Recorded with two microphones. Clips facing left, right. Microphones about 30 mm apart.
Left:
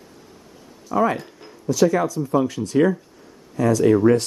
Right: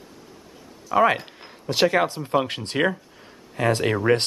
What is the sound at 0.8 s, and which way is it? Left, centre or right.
Speech, right.